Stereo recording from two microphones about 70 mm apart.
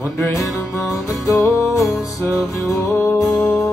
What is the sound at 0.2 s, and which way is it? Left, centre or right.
Music, centre.